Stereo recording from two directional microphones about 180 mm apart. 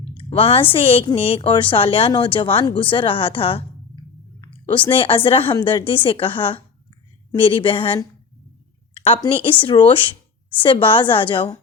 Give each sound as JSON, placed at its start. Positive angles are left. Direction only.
{"t": 0.2, "sound": "a woman's voice", "side_deg": 30}
{"t": 4.9, "sound": "a woman's voice", "side_deg": 30}
{"t": 9.0, "sound": "a sound", "side_deg": 30}
{"t": 9.2, "sound": "a woman's voice", "side_deg": 30}